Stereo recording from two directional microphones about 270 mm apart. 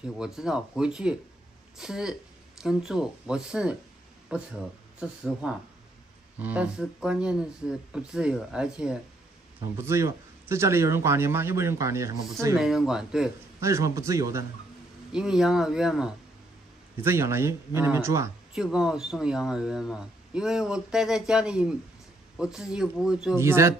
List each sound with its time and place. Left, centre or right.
0.0 s a man's voice: centre